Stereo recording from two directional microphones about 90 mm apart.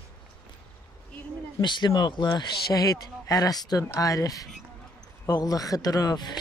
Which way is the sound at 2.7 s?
40° left (ahead or behind).